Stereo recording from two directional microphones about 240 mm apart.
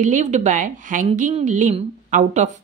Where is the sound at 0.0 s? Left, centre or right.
Right.